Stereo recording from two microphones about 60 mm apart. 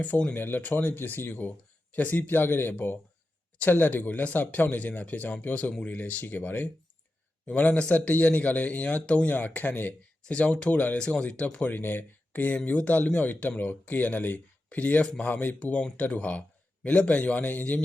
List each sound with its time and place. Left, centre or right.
0.0 s speech: left
10.9 s speech: centre
11.7 s speech: left
15.5 s speech: left